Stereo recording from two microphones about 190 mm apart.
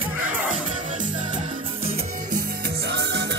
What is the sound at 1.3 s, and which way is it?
Music, 30° right (ahead or behind).